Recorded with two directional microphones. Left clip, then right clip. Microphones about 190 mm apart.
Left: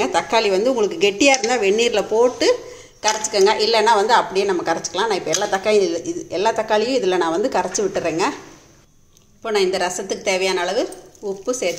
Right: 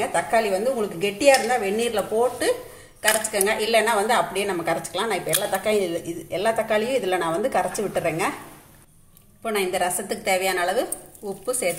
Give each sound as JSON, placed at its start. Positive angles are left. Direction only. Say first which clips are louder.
{"t": 0.0, "sound": "a woman's voice", "louder": "left 4 dB", "side_deg": 45}
{"t": 9.4, "sound": "a woman's voice", "louder": "left 4 dB", "side_deg": 20}